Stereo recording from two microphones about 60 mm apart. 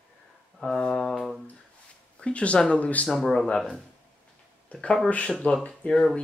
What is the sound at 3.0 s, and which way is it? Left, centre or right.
Speech, centre.